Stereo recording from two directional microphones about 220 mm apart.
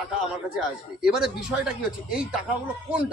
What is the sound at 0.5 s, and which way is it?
Speech, 5° right (ahead or behind).